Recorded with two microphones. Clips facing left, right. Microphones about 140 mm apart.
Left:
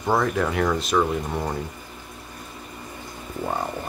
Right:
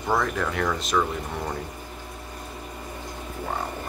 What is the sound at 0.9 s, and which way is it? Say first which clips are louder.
Speech: left 3 dB; 15° left (ahead or behind).